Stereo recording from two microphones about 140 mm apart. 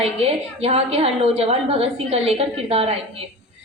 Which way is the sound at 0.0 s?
45° right (ahead or behind).